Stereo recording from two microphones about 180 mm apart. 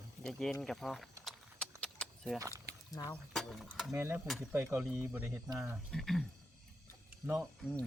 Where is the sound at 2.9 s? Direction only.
20° left (ahead or behind).